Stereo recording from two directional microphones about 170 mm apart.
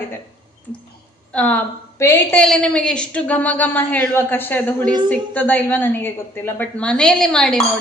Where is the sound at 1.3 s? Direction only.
10° left (ahead or behind).